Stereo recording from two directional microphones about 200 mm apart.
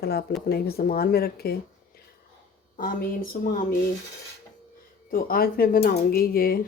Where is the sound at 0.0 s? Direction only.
50° left (ahead or behind).